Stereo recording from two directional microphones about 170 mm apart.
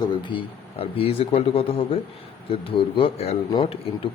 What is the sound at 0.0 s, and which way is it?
Speech, 25° left (ahead or behind).